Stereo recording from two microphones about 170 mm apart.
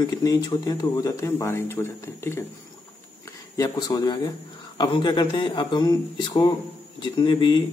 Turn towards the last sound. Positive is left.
turn(degrees=25)  # may be behind; listen again after turning